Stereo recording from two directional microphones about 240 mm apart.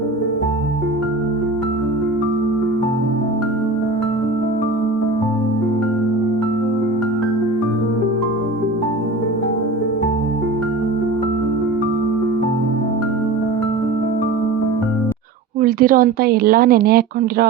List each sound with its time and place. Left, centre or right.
15.6 s speech: right